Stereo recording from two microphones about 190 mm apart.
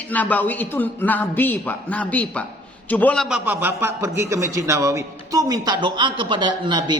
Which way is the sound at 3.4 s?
10° right (ahead or behind).